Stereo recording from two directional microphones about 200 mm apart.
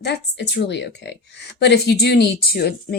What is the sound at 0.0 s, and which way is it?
A woman's voice, 55° left (ahead or behind).